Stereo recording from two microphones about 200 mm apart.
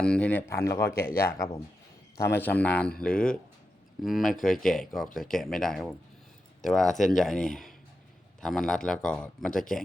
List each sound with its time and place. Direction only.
0.0 s speech: 5° left (ahead or behind)
1.0 s speech: 45° left (ahead or behind)
2.2 s a man's voice: 10° left (ahead or behind)